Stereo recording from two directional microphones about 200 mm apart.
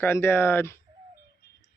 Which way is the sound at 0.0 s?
10° left (ahead or behind).